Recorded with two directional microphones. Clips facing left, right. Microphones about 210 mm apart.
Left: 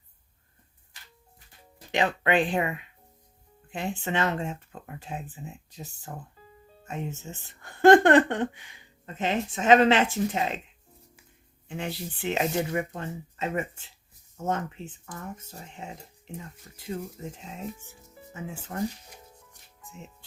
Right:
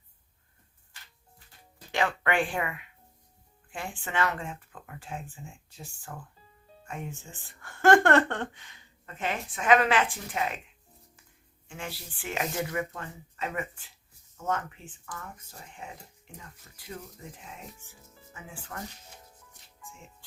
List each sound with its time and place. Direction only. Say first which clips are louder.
1.9 s speech: left 3 dB; 20° left (ahead or behind)
11.7 s speech: left 7 dB; 20° left (ahead or behind)
18.7 s speech: left 10 dB; 30° left (ahead or behind)